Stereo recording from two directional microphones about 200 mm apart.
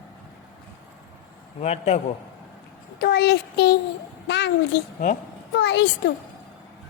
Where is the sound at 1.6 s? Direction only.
30° left (ahead or behind).